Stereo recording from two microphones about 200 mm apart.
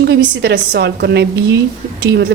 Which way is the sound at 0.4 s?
55° right (ahead or behind).